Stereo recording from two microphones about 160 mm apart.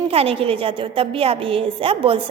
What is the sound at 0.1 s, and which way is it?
A woman's voice, 35° right (ahead or behind).